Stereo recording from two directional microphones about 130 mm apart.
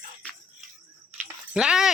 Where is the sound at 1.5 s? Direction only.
5° right (ahead or behind).